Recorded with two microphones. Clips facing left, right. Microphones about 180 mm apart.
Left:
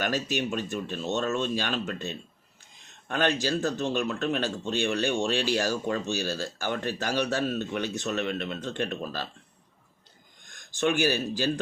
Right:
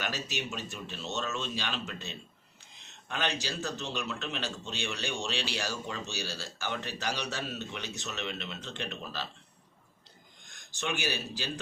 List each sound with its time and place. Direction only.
0.0 s a man's voice: 50° left (ahead or behind)
10.5 s speech: 50° left (ahead or behind)